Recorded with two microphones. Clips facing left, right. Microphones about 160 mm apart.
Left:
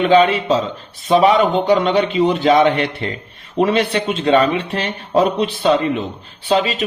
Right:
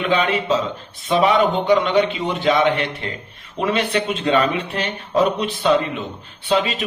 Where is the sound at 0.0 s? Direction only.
35° left (ahead or behind).